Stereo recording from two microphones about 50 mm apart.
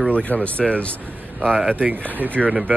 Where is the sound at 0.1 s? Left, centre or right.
Left.